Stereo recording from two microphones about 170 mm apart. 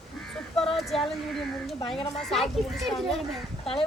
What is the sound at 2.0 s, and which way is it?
Speech, 35° left (ahead or behind).